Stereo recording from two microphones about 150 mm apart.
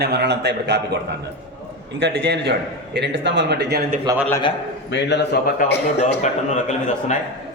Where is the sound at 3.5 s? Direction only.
90° right.